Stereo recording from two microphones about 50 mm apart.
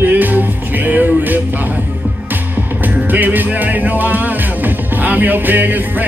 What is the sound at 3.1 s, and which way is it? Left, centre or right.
Music, right.